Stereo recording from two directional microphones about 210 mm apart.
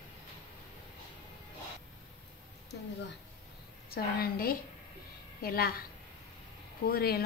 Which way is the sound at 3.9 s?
45° left (ahead or behind).